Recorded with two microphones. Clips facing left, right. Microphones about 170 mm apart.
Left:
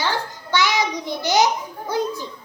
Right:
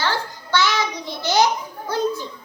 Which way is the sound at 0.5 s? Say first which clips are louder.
Even; 15° left (ahead or behind).